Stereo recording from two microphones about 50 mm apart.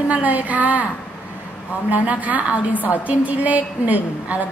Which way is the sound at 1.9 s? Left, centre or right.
Right.